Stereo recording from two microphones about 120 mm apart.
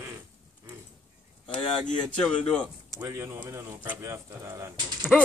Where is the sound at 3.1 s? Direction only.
25° right (ahead or behind).